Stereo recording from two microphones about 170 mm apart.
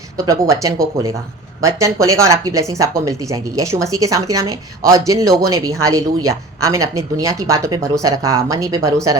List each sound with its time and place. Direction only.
0.3 s speech: 20° right (ahead or behind)